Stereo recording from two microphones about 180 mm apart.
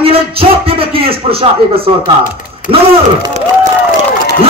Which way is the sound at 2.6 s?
45° left (ahead or behind).